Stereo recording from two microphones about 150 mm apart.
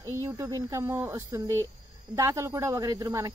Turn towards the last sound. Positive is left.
turn(degrees=-25)  # may be behind; listen again after turning